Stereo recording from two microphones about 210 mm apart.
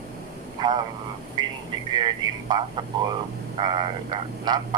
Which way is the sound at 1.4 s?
20° right (ahead or behind).